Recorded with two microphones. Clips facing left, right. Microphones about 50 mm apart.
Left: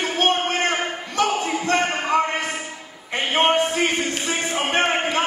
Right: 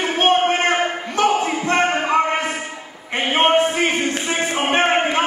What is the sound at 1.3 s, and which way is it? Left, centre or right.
Music, right.